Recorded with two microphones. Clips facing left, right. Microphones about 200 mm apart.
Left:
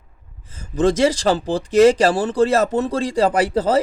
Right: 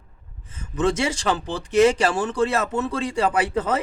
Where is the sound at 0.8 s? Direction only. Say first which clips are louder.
Left 6 dB; 35° left (ahead or behind).